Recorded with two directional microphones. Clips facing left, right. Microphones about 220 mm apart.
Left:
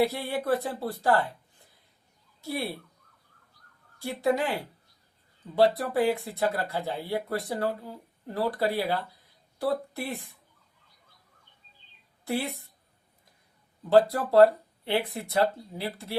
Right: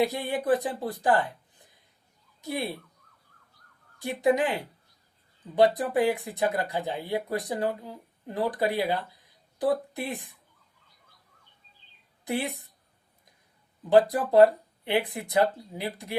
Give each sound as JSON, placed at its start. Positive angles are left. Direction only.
{"t": 0.0, "sound": "speech", "side_deg": -15}
{"t": 2.4, "sound": "speech", "side_deg": -15}
{"t": 3.9, "sound": "speech", "side_deg": -15}
{"t": 12.2, "sound": "speech", "side_deg": -15}
{"t": 13.9, "sound": "speech", "side_deg": -15}